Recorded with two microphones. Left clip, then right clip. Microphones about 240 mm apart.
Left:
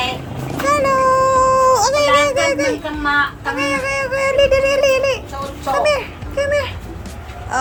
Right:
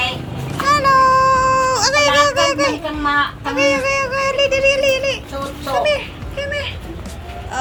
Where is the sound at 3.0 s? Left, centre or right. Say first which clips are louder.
Even; right.